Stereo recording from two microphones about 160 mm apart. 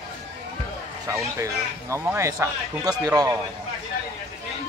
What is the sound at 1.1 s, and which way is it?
Speech, 20° right (ahead or behind).